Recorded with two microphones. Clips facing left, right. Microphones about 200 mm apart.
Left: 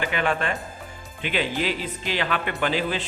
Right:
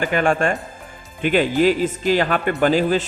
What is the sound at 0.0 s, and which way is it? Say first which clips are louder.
Speech: right 6 dB; 45° right (ahead or behind).